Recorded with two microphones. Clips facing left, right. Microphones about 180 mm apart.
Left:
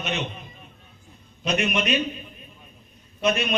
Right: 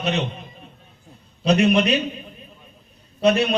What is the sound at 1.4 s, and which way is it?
Speech, 35° right (ahead or behind).